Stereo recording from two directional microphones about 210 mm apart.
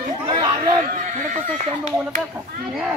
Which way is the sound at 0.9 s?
35° right (ahead or behind).